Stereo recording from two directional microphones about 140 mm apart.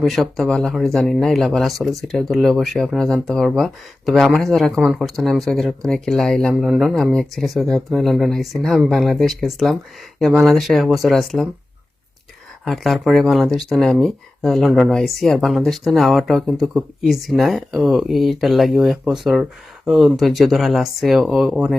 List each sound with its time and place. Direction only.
0.0 s speech: centre (ahead or behind)
12.6 s speech: centre (ahead or behind)